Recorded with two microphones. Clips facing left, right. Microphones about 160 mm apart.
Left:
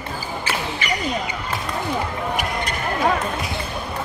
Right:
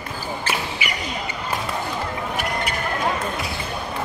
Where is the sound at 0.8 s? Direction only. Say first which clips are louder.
Left 4 dB; 10° right (ahead or behind).